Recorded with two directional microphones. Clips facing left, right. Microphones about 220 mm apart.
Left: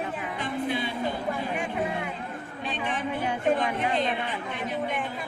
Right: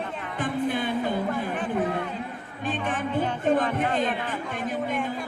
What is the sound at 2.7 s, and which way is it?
Speech, 50° right (ahead or behind).